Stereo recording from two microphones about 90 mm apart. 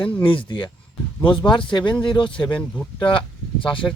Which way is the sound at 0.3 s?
65° left (ahead or behind).